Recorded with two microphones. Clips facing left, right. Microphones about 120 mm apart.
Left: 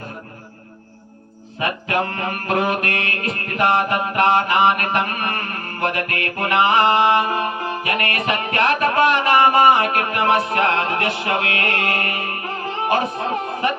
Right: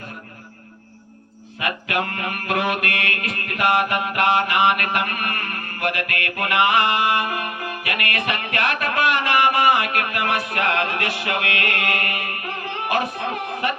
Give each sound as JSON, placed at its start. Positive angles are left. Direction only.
{"t": 1.5, "sound": "music", "side_deg": 30}